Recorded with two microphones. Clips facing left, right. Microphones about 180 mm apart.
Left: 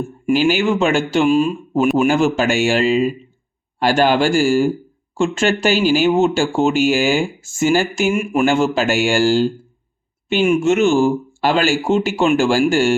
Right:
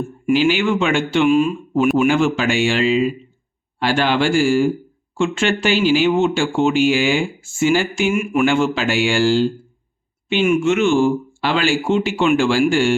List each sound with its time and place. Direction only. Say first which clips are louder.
0.3 s speech: left 1 dB; 40° left (ahead or behind)